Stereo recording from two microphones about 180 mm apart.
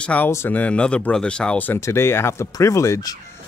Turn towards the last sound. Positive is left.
turn(degrees=20)  # may be behind; listen again after turning